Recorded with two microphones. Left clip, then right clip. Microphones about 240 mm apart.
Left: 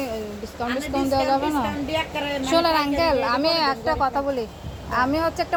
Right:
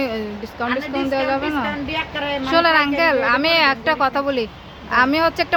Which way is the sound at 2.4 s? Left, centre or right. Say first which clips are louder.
Right 5 dB; centre.